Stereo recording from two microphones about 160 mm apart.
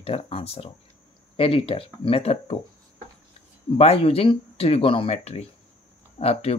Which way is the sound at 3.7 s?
40° left (ahead or behind).